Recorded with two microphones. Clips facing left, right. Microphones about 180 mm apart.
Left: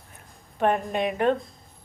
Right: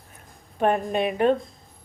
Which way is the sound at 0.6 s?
25° right (ahead or behind).